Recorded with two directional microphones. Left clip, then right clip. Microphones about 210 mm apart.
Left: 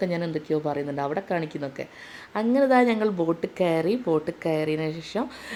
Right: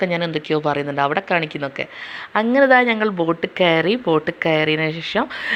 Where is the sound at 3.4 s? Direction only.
10° right (ahead or behind).